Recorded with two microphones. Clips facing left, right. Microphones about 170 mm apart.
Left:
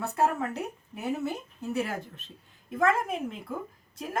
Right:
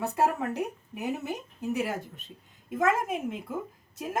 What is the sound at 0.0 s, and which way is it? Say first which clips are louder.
Speech: even; 15° right (ahead or behind).